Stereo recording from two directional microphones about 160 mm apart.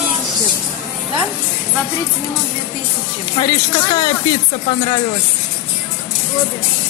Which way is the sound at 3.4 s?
25° left (ahead or behind).